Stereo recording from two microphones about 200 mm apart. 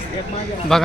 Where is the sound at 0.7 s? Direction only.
Centre (ahead or behind).